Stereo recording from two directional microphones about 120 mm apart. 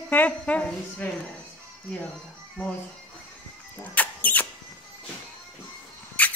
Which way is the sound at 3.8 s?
15° left (ahead or behind).